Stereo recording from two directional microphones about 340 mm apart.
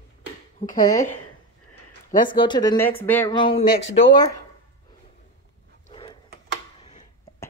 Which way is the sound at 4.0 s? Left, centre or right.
Centre.